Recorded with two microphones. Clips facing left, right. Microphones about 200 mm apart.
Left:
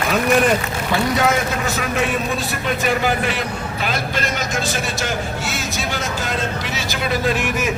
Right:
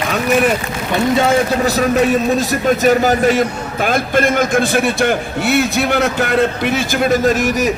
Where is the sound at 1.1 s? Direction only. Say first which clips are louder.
Right 5 dB; 30° right (ahead or behind).